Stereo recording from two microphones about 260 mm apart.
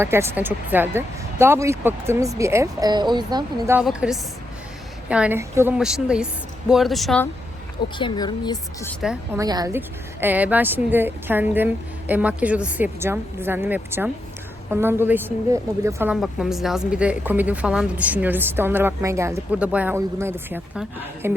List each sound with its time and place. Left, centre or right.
0.0 s a woman's voice: centre
3.8 s a woman's voice: centre
7.9 s speech: centre
9.0 s a woman's voice: centre
9.4 s a woman's voice: centre